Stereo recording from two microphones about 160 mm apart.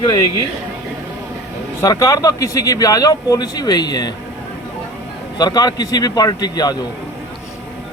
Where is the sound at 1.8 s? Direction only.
20° left (ahead or behind).